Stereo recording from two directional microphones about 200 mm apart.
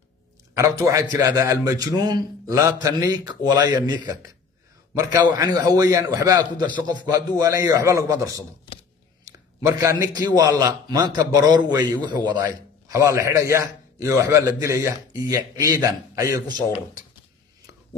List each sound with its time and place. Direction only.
0.6 s a man's voice: 15° right (ahead or behind)
5.3 s a man's voice: 15° right (ahead or behind)